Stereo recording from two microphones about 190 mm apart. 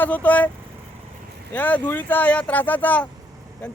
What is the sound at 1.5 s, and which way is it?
Speech, 10° left (ahead or behind).